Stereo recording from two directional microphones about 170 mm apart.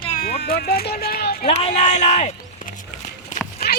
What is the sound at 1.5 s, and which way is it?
Speech, 40° left (ahead or behind).